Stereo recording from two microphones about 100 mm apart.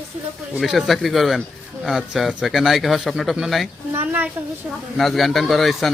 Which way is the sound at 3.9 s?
15° right (ahead or behind).